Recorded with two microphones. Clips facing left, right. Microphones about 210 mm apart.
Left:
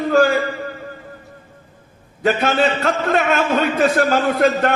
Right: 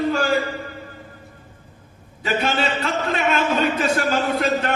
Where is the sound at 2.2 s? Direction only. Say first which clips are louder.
Left 5 dB; 50° left (ahead or behind).